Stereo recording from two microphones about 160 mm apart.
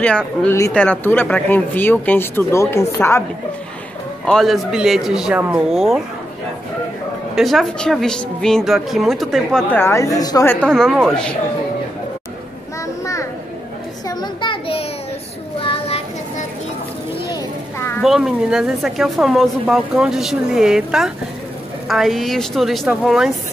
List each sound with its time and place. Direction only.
0.0 s a woman's voice: 5° left (ahead or behind)
0.5 s speech: 15° left (ahead or behind)
4.3 s a woman's voice: centre (ahead or behind)
7.3 s a woman's voice: centre (ahead or behind)
10.7 s a woman's voice: 5° left (ahead or behind)
12.8 s children playing: 20° left (ahead or behind)
14.0 s a sound: 30° left (ahead or behind)
15.6 s child singing: 35° left (ahead or behind)
17.3 s children playing: 20° left (ahead or behind)
18.0 s a woman's voice: 5° right (ahead or behind)